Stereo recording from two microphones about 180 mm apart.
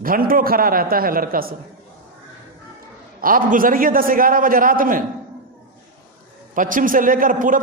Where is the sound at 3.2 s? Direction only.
50° right (ahead or behind).